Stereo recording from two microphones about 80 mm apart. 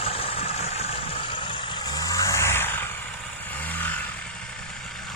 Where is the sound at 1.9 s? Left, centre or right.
Left.